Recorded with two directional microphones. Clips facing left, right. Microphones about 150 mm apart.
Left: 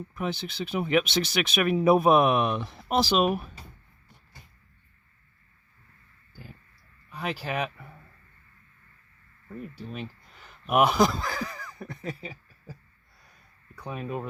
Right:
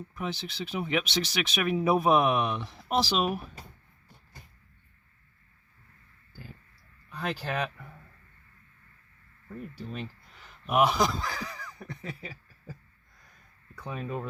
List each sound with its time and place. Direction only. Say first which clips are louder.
0.1 s speech: left 3 dB; 55° left (ahead or behind)
7.1 s speech: left 1 dB; 10° left (ahead or behind)
9.5 s speech: left 1 dB; 5° left (ahead or behind)
10.4 s speech: left 2 dB; 55° left (ahead or behind)
13.8 s speech: left 2 dB; 10° left (ahead or behind)